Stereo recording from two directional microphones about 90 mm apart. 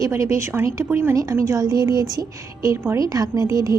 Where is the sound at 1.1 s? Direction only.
40° right (ahead or behind).